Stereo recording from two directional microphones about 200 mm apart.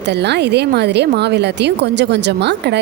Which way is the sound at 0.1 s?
55° right (ahead or behind).